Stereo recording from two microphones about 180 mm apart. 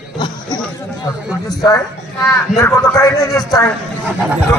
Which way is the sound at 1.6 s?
20° left (ahead or behind).